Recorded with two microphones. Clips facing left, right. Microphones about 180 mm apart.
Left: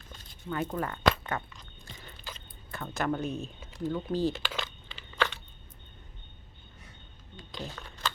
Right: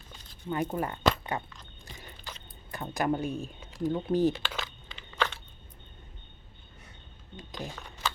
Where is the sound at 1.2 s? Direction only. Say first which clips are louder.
Right 1 dB; 20° right (ahead or behind).